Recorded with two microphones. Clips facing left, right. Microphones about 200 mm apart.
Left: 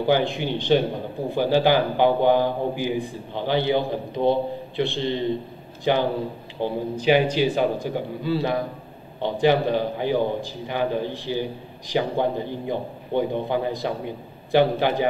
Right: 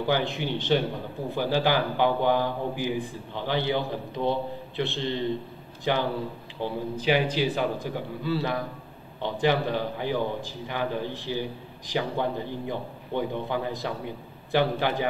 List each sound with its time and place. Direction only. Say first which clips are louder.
0.0 s a man's voice: left 5 dB; 20° left (ahead or behind)